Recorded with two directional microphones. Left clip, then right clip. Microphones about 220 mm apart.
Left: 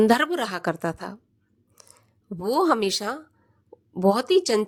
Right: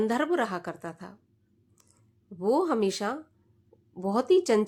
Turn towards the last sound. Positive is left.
turn(degrees=40)  # may be behind; listen again after turning